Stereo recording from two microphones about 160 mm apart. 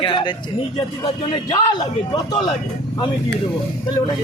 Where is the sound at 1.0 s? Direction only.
35° left (ahead or behind).